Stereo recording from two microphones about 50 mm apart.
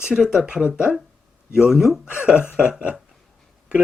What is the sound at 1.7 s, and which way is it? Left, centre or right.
Speech, centre.